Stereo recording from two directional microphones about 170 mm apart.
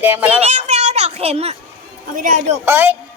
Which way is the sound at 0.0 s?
10° right (ahead or behind).